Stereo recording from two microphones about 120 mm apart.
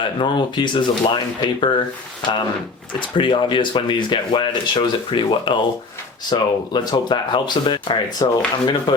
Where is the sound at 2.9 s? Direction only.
45° left (ahead or behind).